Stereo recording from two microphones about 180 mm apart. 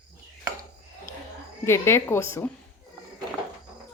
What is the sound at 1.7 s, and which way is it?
Speech, 15° left (ahead or behind).